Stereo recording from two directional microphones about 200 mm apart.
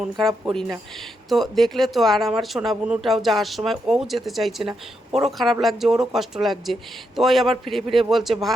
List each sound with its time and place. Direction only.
0.0 s speech: centre (ahead or behind)